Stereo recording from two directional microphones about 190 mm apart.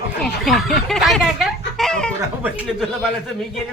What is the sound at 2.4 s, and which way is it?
Speech, 5° right (ahead or behind).